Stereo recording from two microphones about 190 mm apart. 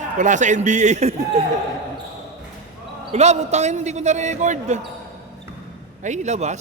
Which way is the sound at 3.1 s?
35° right (ahead or behind).